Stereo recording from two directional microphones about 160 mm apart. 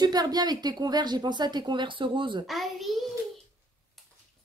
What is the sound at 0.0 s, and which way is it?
Speech, 25° right (ahead or behind).